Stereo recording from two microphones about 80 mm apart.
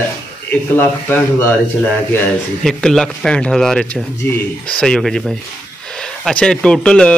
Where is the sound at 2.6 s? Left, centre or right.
Centre.